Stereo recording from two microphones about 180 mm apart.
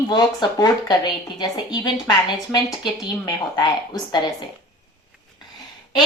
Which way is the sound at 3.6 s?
25° left (ahead or behind).